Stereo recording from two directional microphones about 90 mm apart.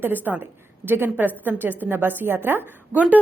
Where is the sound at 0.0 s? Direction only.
20° right (ahead or behind).